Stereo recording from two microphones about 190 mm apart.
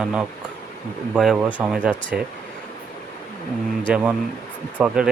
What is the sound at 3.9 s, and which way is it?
Speech, 5° right (ahead or behind).